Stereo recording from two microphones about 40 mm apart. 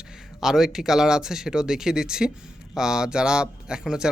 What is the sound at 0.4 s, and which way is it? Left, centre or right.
Speech, centre.